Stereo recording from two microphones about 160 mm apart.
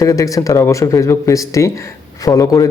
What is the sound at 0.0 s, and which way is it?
A man's voice, 20° left (ahead or behind).